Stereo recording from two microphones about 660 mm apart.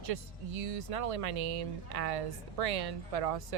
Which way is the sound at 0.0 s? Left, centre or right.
Right.